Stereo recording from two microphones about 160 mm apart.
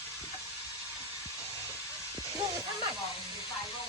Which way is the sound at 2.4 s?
20° right (ahead or behind).